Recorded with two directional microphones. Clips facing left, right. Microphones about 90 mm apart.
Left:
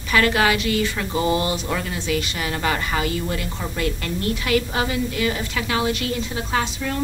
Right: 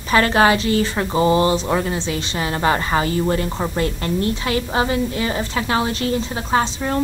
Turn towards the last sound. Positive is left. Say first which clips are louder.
# right 5 dB
turn(degrees=-35)  # may be behind; listen again after turning